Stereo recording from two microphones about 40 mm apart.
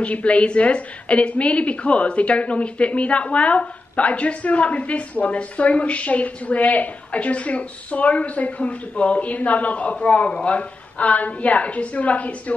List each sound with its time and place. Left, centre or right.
0.0 s a woman's voice: left